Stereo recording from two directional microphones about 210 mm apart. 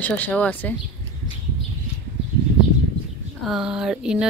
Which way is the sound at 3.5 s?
5° right (ahead or behind).